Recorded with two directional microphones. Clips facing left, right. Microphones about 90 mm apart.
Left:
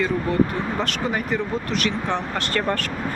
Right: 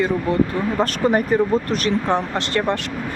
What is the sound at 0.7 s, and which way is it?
Speech, 45° right (ahead or behind).